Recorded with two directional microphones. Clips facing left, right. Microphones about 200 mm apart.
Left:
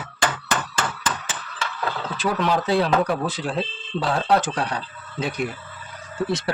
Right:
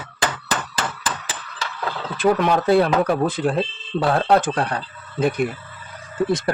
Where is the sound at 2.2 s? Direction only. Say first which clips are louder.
Right 5 dB; 55° right (ahead or behind).